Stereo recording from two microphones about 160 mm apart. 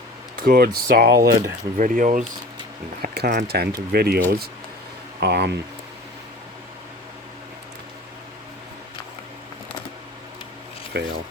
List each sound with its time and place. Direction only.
0.3 s speech: 65° right (ahead or behind)
1.5 s speech: 60° right (ahead or behind)
3.4 s speech: 80° right
5.2 s speech: 90° right
10.9 s speech: 90° right